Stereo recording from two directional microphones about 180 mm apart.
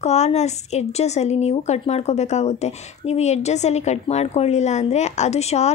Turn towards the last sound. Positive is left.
turn(degrees=35)  # may be behind; listen again after turning